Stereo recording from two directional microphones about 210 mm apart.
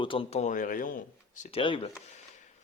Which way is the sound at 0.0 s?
25° left (ahead or behind).